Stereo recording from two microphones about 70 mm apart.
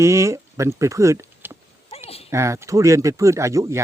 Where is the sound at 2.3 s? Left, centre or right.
Right.